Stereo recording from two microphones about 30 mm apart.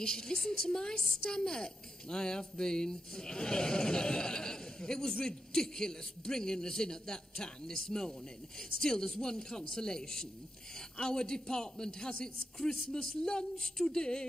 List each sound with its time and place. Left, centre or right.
0.0 s speech: left